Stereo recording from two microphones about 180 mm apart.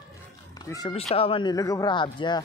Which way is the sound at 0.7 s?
20° left (ahead or behind).